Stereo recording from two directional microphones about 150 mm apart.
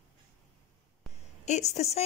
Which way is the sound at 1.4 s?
50° left (ahead or behind).